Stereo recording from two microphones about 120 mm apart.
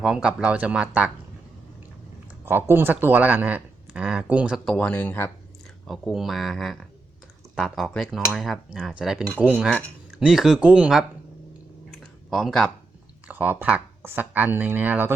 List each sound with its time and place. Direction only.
0.0 s speech: 5° right (ahead or behind)
2.4 s speech: 20° right (ahead or behind)
4.6 s speech: 10° left (ahead or behind)
5.9 s speech: centre (ahead or behind)
11.9 s a sound: centre (ahead or behind)
13.2 s speech: 15° right (ahead or behind)